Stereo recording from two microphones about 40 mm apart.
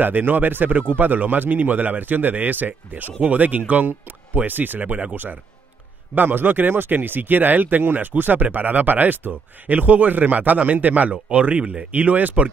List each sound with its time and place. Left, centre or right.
0.0 s speech: right